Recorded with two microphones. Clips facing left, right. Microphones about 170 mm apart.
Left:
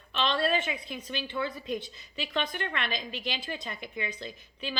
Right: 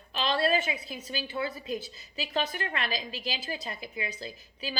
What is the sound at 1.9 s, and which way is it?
Speech, 40° right (ahead or behind).